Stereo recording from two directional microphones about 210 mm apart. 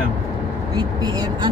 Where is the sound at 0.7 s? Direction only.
20° right (ahead or behind).